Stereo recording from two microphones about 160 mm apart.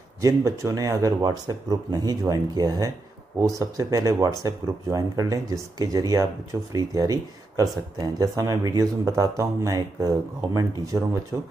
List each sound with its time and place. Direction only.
0.2 s speech: 20° right (ahead or behind)